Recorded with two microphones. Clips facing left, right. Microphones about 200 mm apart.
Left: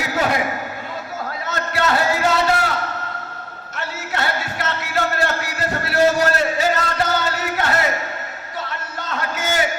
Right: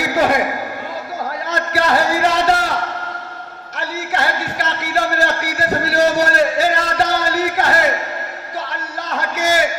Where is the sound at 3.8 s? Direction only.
35° right (ahead or behind).